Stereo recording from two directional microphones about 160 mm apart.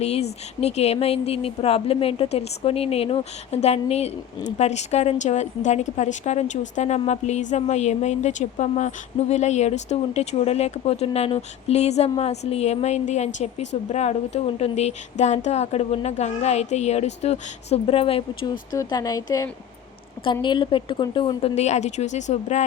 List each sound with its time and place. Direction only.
0.0 s speech: 40° left (ahead or behind)
18.7 s speech: 25° left (ahead or behind); by 22.6 s 45° left (ahead or behind)